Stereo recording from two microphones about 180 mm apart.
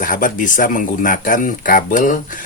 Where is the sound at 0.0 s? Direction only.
50° left (ahead or behind).